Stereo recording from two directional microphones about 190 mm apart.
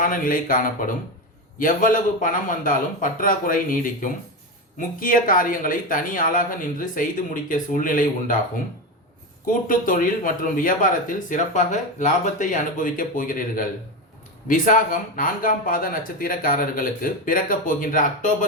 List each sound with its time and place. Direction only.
0.0 s speech: 45° left (ahead or behind)
9.5 s speech: 45° left (ahead or behind)